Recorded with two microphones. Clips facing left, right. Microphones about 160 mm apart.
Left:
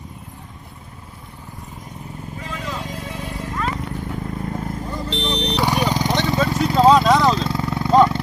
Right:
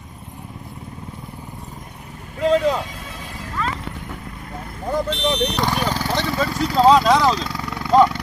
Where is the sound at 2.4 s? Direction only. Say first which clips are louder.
Right 15 dB; 75° right (ahead or behind).